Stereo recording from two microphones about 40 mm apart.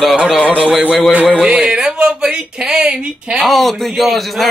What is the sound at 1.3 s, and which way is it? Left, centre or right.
Speech, right.